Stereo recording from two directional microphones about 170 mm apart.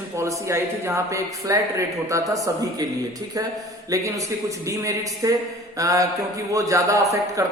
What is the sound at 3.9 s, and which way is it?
A man's voice, 20° right (ahead or behind).